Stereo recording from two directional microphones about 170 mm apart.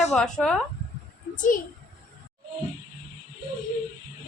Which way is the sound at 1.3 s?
50° left (ahead or behind).